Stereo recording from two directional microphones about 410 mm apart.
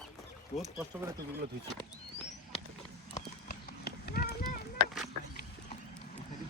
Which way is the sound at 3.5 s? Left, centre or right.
Left.